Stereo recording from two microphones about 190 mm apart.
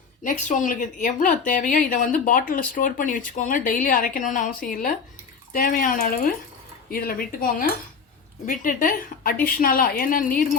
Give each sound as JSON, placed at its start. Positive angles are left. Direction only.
{"t": 0.3, "sound": "speech", "side_deg": 40}